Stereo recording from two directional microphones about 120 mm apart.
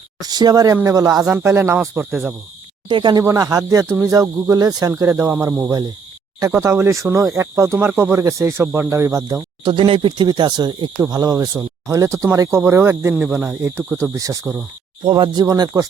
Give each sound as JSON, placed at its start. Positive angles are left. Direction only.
{"t": 0.2, "sound": "speech", "side_deg": -35}
{"t": 2.9, "sound": "speech", "side_deg": -40}
{"t": 9.6, "sound": "speech", "side_deg": -45}
{"t": 13.2, "sound": "speech", "side_deg": -10}
{"t": 15.0, "sound": "speech", "side_deg": -40}